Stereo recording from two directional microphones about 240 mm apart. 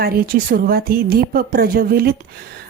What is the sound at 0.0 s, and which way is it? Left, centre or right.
A woman's voice, right.